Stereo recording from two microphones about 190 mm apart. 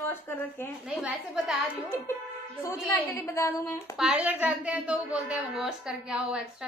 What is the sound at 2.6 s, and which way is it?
Speech, 15° left (ahead or behind).